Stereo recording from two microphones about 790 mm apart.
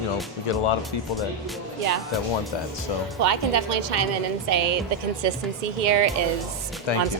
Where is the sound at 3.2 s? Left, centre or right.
Right.